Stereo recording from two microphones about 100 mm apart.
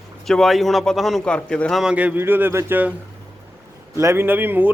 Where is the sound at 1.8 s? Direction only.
10° right (ahead or behind).